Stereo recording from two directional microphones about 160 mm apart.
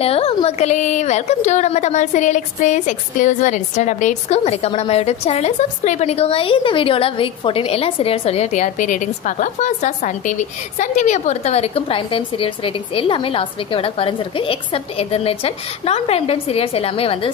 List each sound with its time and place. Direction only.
0.0 s a woman's voice: 35° left (ahead or behind)